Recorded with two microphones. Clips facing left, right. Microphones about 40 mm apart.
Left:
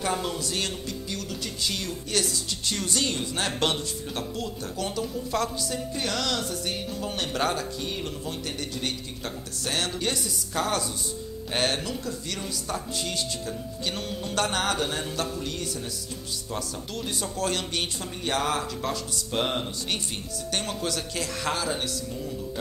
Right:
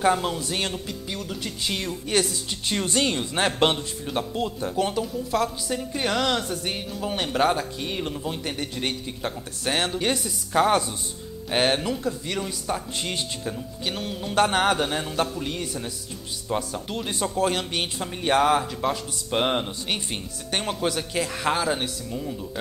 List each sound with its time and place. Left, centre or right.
0.2 s speech: right
5.0 s a woman's voice: centre
5.7 s speech: right
13.8 s a sound: centre
14.3 s speech: right
17.4 s speech: centre